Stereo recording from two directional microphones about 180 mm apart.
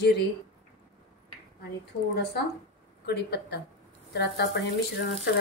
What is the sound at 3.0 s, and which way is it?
Speech, 65° left (ahead or behind).